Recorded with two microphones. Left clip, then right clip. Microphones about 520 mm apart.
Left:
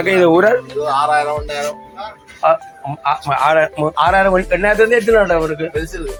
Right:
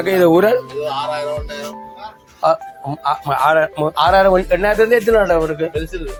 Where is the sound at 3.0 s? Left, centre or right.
Right.